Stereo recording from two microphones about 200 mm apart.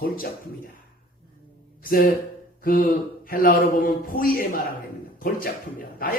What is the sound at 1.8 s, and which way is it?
Speech, 45° left (ahead or behind).